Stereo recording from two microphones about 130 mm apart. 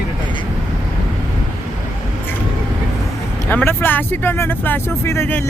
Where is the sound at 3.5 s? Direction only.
15° left (ahead or behind).